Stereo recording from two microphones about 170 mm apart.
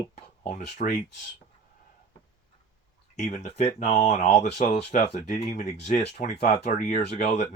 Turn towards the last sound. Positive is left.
turn(degrees=45)  # may be behind; listen again after turning